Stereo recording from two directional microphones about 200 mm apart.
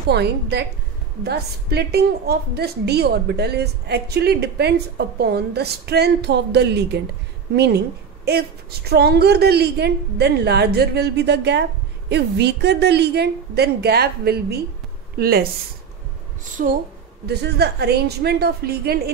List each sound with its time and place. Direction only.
0.1 s a woman's voice: 55° right (ahead or behind)
16.6 s a woman's voice: 45° right (ahead or behind)
17.3 s a woman's voice: 55° right (ahead or behind)